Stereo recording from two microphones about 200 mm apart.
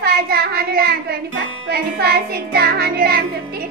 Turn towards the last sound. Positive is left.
turn(degrees=-50)  # may be behind; listen again after turning